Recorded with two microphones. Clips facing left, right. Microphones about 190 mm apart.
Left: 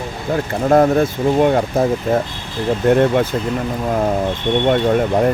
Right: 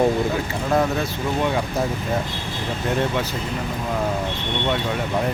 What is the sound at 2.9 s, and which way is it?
Speech, 55° left (ahead or behind).